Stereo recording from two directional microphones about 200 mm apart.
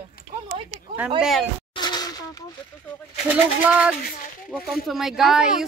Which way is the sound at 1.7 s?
20° left (ahead or behind).